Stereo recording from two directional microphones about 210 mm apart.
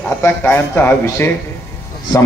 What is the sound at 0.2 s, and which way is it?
A man's voice, 10° left (ahead or behind).